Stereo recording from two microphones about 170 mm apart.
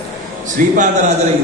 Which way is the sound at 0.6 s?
50° right (ahead or behind).